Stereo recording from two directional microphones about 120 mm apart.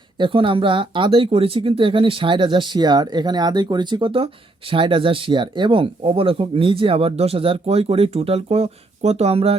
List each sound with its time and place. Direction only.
0.2 s speech: 45° right (ahead or behind)